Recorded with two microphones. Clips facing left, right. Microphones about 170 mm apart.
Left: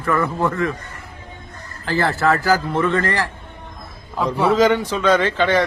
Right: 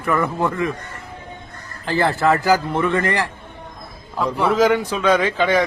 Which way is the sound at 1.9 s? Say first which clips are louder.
Right 1 dB; 20° right (ahead or behind).